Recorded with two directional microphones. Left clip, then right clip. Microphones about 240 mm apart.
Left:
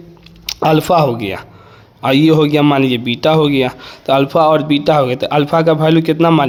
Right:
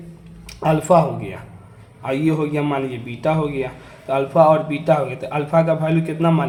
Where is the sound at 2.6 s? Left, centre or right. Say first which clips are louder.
Left 10 dB; left.